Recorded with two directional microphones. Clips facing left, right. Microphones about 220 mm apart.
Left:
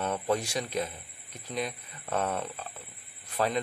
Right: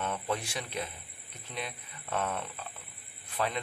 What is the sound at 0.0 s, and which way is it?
Speech, 40° left (ahead or behind).